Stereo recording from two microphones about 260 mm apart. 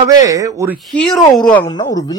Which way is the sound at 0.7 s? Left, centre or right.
Centre.